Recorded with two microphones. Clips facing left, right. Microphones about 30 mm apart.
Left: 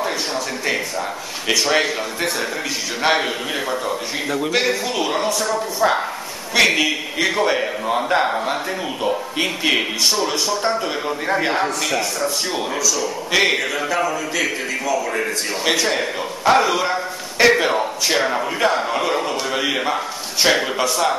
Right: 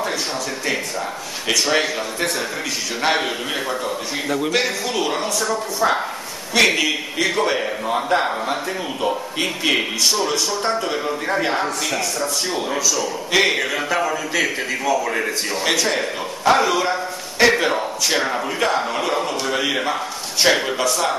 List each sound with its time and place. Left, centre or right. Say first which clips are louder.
1.5 s a man's voice: left 1 dB; centre
6.5 s a man's voice: left 1 dB; centre
12.0 s speech: left 1 dB; left
13.3 s a man's voice: even; centre
13.6 s a man's voice: even; centre
15.6 s a man's voice: left 1 dB; centre